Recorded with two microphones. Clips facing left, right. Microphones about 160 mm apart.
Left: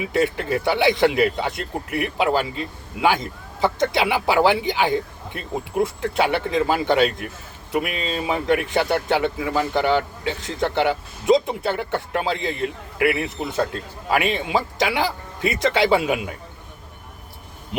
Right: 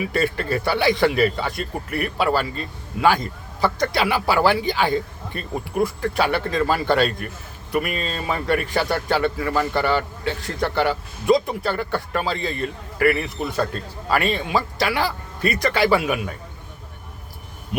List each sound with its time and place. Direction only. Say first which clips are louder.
0.1 s a man's voice: left 1 dB; 20° left (ahead or behind)